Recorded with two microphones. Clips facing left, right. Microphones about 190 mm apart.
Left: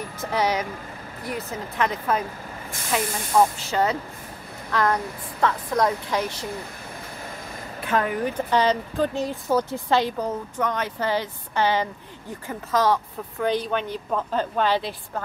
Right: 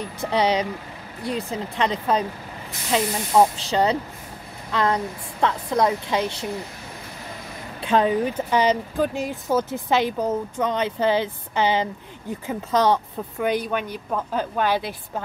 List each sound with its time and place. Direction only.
0.2 s a woman's voice: 25° right (ahead or behind)
7.8 s speech: 20° right (ahead or behind)
9.2 s speech: 15° left (ahead or behind)
9.7 s speech: 20° right (ahead or behind)